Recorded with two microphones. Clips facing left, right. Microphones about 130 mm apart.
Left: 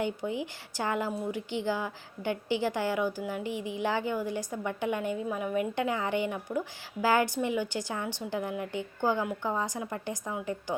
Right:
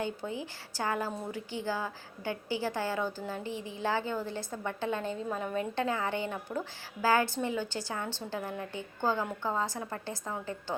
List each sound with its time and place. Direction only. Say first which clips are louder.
0.0 s a woman's voice: left 4 dB; 15° left (ahead or behind)